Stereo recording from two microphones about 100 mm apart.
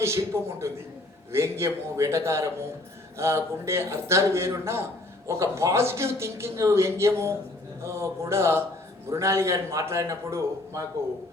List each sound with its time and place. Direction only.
0.0 s a man's voice: 30° right (ahead or behind)